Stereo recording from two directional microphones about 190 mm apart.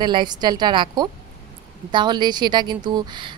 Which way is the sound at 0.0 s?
25° right (ahead or behind).